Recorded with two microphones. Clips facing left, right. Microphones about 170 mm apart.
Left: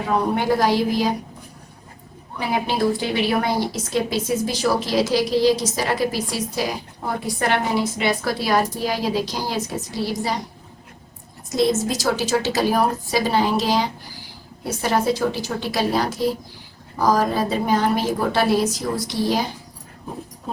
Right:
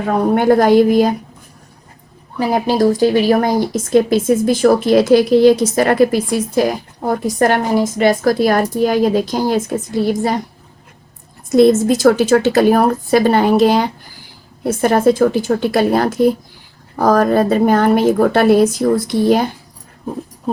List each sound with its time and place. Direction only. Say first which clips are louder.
0.0 s speech: right 7 dB; 50° right (ahead or behind)
2.4 s speech: right 7 dB; 40° right (ahead or behind)
11.4 s a woman's voice: right 10 dB; 55° right (ahead or behind)